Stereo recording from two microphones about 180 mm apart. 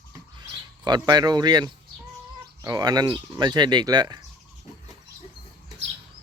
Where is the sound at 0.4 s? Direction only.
25° right (ahead or behind).